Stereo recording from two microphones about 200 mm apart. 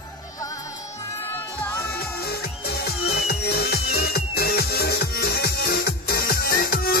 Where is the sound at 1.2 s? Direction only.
10° left (ahead or behind).